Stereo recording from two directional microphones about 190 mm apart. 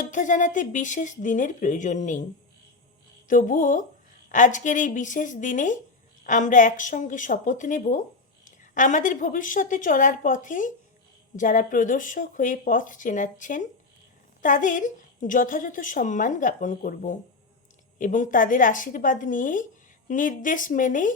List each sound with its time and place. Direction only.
0.0 s speech: 40° left (ahead or behind)
3.2 s a woman's voice: 45° left (ahead or behind)